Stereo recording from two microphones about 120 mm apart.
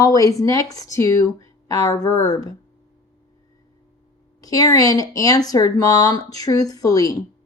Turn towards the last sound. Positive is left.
turn(degrees=30)  # may be behind; listen again after turning